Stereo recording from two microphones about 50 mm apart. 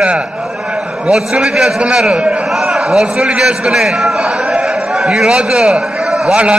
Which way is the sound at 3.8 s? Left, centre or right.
Centre.